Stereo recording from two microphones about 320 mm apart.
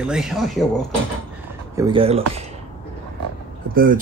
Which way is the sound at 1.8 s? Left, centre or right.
Centre.